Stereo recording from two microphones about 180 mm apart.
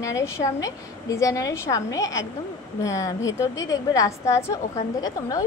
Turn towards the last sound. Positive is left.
turn(degrees=20)  # may be behind; listen again after turning